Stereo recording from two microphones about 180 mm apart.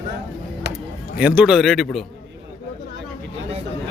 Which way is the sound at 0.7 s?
70° right (ahead or behind).